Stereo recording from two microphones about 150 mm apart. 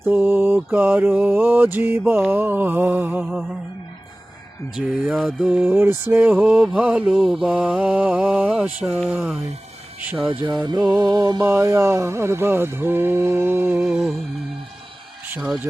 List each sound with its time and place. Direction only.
0.0 s mantra: 15° right (ahead or behind)
4.7 s mantra: 5° right (ahead or behind)
10.4 s music: 30° right (ahead or behind)
10.8 s mantra: 10° right (ahead or behind)
11.0 s mantra: 25° right (ahead or behind); by 14.1 s 5° right (ahead or behind)